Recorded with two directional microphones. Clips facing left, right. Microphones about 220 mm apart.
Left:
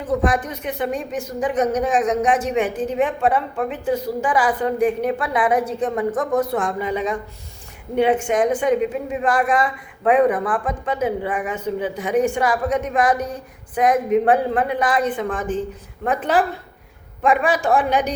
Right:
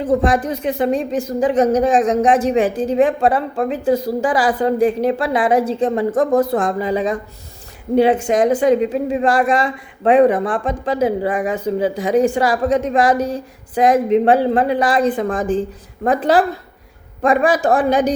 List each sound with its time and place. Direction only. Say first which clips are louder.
0.0 s a woman's voice: right 4 dB; 30° right (ahead or behind)
13.1 s a sound: right 6 dB; 90° right
13.7 s a woman's voice: right 4 dB; 30° right (ahead or behind)